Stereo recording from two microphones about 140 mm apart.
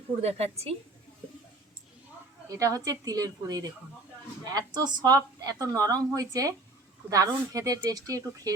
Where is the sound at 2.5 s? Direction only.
25° right (ahead or behind).